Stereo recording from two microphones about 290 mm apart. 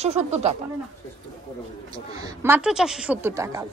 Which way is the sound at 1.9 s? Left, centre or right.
Centre.